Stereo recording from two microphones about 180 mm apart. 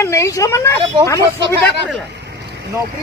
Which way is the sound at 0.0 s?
15° left (ahead or behind).